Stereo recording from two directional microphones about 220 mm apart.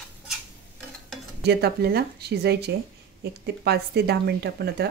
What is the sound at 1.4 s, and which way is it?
Speech, 45° right (ahead or behind).